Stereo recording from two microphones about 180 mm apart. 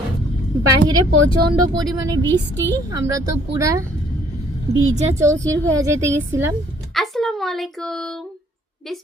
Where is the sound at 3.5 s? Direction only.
15° right (ahead or behind).